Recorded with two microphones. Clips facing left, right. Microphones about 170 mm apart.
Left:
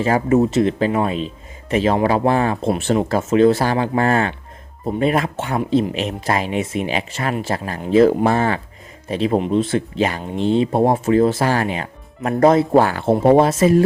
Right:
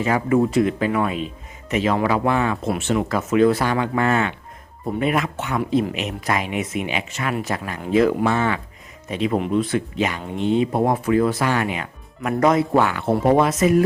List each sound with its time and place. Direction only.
0.0 s speech: 30° left (ahead or behind)